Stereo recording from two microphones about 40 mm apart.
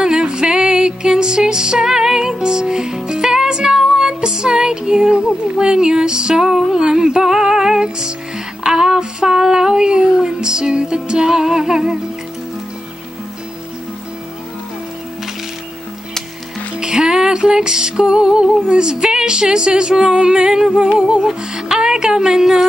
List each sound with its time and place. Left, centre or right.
0.0 s music: right
8.6 s child singing: centre
16.8 s music: centre
21.5 s speech: centre